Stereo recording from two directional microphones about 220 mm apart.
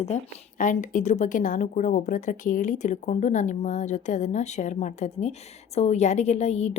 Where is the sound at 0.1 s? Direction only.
30° left (ahead or behind).